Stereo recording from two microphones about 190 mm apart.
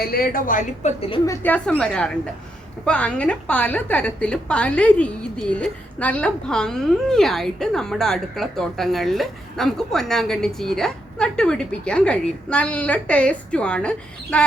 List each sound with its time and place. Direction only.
0.0 s a woman's voice: 50° left (ahead or behind); by 1.2 s 35° left (ahead or behind)
1.2 s a woman's voice: 15° left (ahead or behind)